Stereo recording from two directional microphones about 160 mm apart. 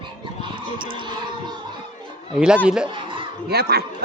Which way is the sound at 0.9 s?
30° right (ahead or behind).